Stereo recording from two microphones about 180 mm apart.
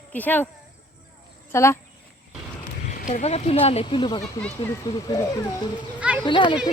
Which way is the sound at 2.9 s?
45° left (ahead or behind).